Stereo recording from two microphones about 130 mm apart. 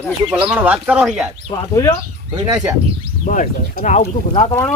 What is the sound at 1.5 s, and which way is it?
Speech, 25° left (ahead or behind).